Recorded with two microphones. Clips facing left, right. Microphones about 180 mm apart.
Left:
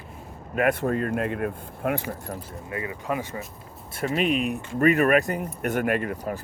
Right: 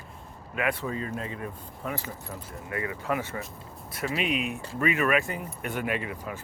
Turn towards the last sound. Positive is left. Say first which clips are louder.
# left 6 dB
turn(degrees=45)  # may be behind; listen again after turning